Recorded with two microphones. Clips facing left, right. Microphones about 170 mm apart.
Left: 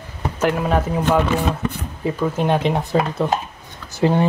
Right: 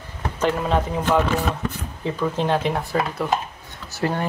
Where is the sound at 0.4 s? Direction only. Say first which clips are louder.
Left 2 dB; 10° left (ahead or behind).